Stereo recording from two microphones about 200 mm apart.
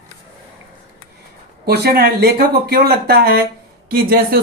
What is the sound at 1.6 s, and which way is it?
Speech, 55° right (ahead or behind).